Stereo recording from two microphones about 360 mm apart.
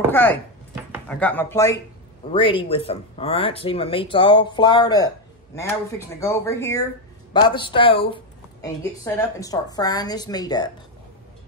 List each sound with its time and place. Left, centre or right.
0.1 s chopping: centre
1.0 s speech: centre